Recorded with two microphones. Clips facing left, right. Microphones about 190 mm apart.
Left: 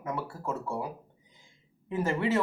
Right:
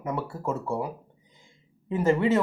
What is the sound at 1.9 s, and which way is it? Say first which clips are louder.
Speech: right 6 dB; 20° right (ahead or behind).